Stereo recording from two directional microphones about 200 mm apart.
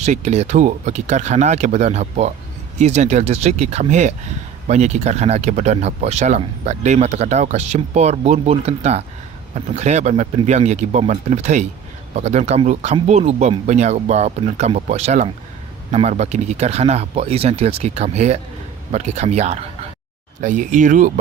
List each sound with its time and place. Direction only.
0.0 s speech: 35° right (ahead or behind)